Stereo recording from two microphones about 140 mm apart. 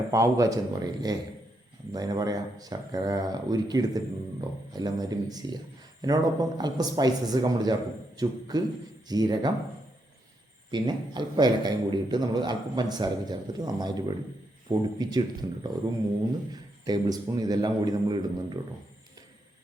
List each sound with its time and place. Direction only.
0.1 s speech: 25° right (ahead or behind)
10.7 s a man's voice: 30° right (ahead or behind)